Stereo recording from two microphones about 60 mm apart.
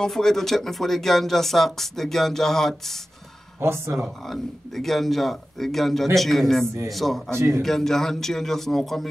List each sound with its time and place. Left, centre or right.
0.0 s speech: centre
3.6 s speech: right
4.3 s speech: centre
7.3 s speech: right
7.6 s speech: centre